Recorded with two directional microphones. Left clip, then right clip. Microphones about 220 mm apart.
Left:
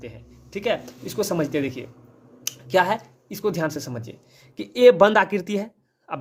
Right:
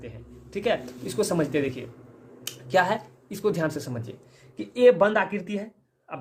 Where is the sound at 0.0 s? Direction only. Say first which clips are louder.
Left 2 dB; 25° left (ahead or behind).